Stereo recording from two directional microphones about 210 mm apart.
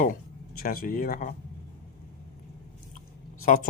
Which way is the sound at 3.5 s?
40° left (ahead or behind).